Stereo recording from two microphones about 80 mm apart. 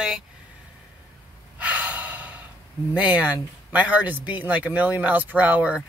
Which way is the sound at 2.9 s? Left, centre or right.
Centre.